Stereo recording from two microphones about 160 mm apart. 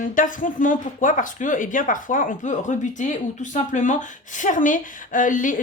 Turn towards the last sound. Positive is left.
turn(degrees=55)  # may be behind; listen again after turning